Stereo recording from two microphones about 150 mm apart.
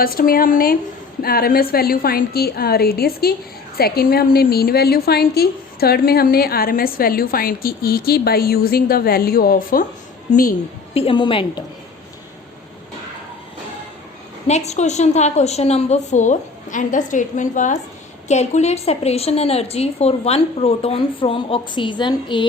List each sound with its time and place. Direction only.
0.0 s speech: 75° left (ahead or behind)
1.2 s a woman's voice: 90° left; by 9.8 s 75° left (ahead or behind)
10.9 s a woman's voice: 35° left (ahead or behind)
14.4 s a woman's voice: 45° left (ahead or behind)